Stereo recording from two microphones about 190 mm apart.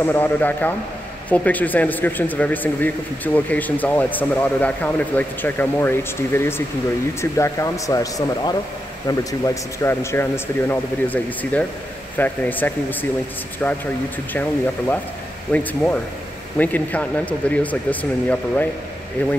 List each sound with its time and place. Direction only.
0.0 s speech: 10° left (ahead or behind)
14.3 s speech: 10° left (ahead or behind)